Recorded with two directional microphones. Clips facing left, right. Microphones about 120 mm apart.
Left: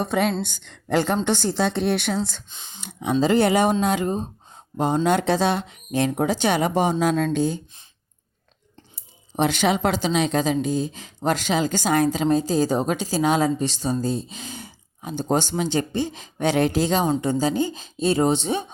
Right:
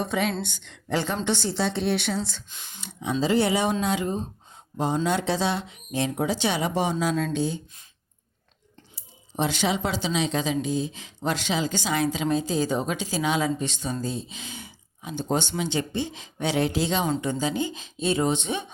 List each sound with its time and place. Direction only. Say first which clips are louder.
0.0 s speech: left 4 dB; 45° left (ahead or behind)
2.5 s speech: left 2 dB; 25° left (ahead or behind)
2.8 s speech: left 5 dB; 55° left (ahead or behind)
5.0 s speech: left 7 dB; 55° left (ahead or behind)
9.3 s speech: left 5 dB; 55° left (ahead or behind); by 18.6 s 35° left (ahead or behind)